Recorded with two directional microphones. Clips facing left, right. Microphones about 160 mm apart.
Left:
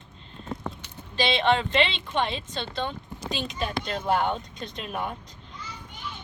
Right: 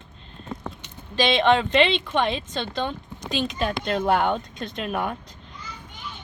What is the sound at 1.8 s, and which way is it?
Speech, 60° right (ahead or behind).